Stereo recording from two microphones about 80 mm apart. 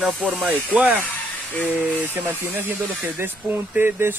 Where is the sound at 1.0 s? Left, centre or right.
Left.